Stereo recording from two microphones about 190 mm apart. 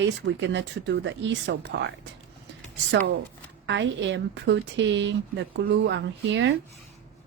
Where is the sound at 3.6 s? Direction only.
70° right (ahead or behind).